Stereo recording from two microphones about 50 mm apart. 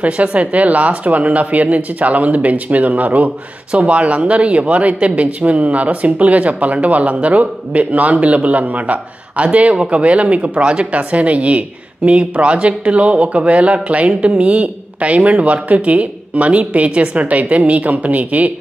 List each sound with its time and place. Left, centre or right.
0.0 s speech: right